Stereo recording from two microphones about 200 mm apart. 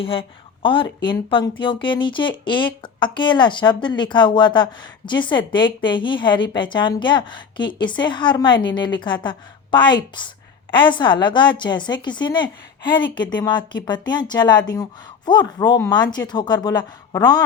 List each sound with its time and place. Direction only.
0.0 s a woman's voice: 25° left (ahead or behind)